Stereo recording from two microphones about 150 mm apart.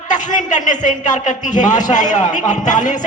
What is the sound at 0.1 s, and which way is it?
A man's voice, 55° left (ahead or behind).